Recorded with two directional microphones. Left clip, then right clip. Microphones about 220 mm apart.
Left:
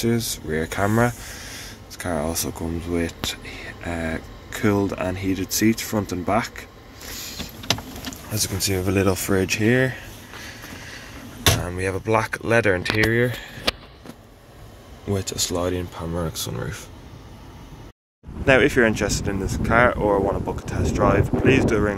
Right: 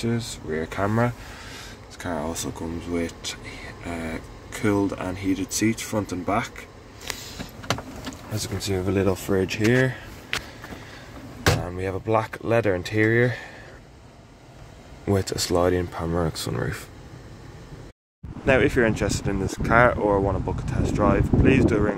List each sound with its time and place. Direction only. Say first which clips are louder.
0.0 s speech: left 5 dB; 10° left (ahead or behind)
8.3 s speech: left 4 dB; centre (ahead or behind)
15.0 s speech: right 1 dB; 25° right (ahead or behind)
18.4 s speech: left 3 dB; 5° left (ahead or behind)